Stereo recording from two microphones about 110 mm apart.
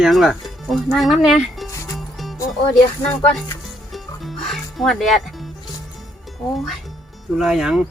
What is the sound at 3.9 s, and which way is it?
Music, centre (ahead or behind).